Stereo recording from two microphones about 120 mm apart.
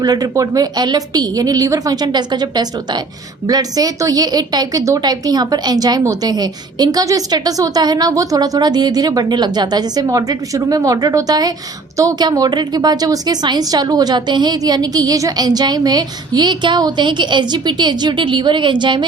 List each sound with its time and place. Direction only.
0.0 s a woman's voice: 30° right (ahead or behind)